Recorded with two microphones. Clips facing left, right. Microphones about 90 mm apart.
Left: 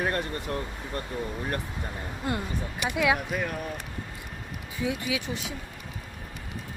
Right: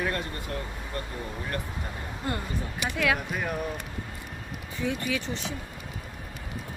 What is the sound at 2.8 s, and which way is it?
Speech, 15° left (ahead or behind).